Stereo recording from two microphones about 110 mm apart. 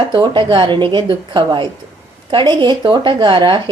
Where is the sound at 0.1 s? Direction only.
45° right (ahead or behind).